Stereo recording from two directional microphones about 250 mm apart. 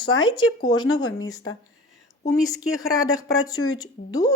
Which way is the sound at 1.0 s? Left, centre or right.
Centre.